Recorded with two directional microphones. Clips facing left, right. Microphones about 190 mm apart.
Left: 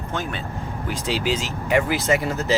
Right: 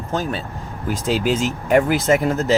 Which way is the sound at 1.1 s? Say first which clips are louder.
Right 5 dB; 50° right (ahead or behind).